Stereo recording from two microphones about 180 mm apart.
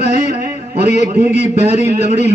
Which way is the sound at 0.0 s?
40° left (ahead or behind).